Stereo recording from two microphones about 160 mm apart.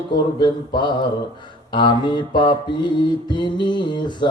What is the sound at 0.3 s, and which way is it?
Speech, 30° left (ahead or behind).